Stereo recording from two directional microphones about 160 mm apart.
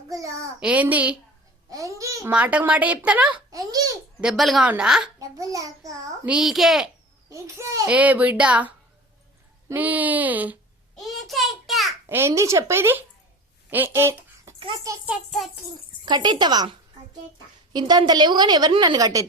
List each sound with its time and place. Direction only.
0.1 s a sound: 20° right (ahead or behind)
0.6 s speech: 10° right (ahead or behind)
1.7 s babbling: 20° right (ahead or behind)
2.3 s speech: 10° right (ahead or behind)
3.5 s babbling: 20° right (ahead or behind)
4.2 s a child's voice: centre (ahead or behind)
5.2 s a woman's voice: 20° right (ahead or behind)
6.2 s a child's voice: 5° right (ahead or behind)
7.3 s a woman's voice: 20° right (ahead or behind)
11.0 s a sound: centre (ahead or behind)
12.0 s speech: 15° right (ahead or behind)
13.7 s a sound: 15° right (ahead or behind)
15.0 s a child's voice: centre (ahead or behind)
16.0 s a woman's voice: 25° right (ahead or behind)